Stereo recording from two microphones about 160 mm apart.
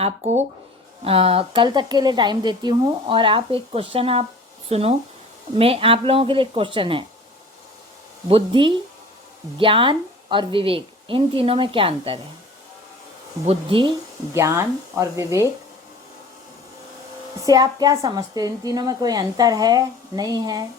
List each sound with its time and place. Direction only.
0.0 s a woman's voice: 45° right (ahead or behind)
8.3 s a woman's voice: 35° right (ahead or behind)
13.4 s a woman's voice: 35° right (ahead or behind)
14.3 s speech: 15° right (ahead or behind)
17.4 s a woman's voice: 25° right (ahead or behind)